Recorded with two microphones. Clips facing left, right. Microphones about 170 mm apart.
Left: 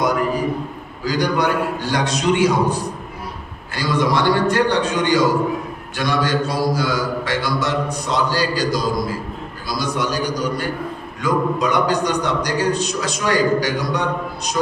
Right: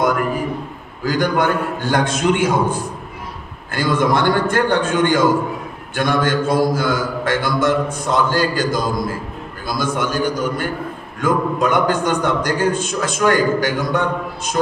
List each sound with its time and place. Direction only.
1.0 s a man's voice: 50° right (ahead or behind)